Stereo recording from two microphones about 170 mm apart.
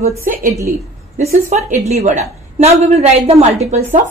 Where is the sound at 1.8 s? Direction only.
40° right (ahead or behind).